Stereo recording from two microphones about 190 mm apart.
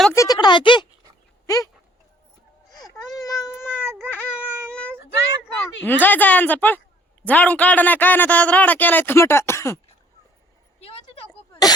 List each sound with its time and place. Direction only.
0.1 s speech: 20° left (ahead or behind)
3.2 s cat: 20° left (ahead or behind)
4.3 s child singing: 10° right (ahead or behind)
4.7 s child singing: 5° left (ahead or behind)
5.8 s a man's voice: 10° left (ahead or behind)
10.8 s a sound: 30° left (ahead or behind)